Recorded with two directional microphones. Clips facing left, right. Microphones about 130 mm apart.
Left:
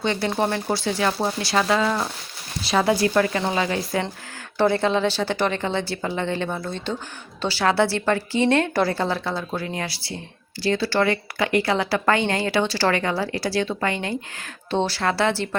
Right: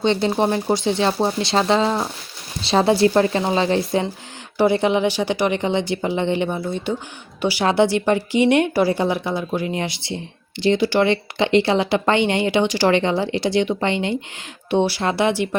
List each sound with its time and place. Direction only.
0.0 s speech: 20° right (ahead or behind)
4.5 s speech: 15° right (ahead or behind)